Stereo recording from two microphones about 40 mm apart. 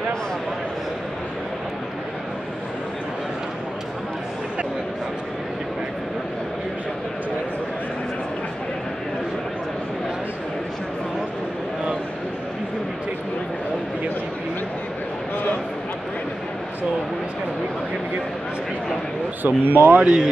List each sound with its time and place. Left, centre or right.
19.4 s speech: right
19.9 s speech: right